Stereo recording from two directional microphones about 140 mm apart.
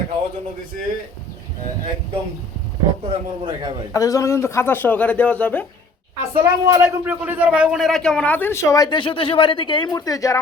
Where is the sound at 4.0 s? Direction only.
25° left (ahead or behind).